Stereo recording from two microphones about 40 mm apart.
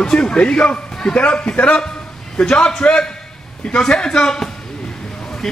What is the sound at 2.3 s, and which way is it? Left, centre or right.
Speech, left.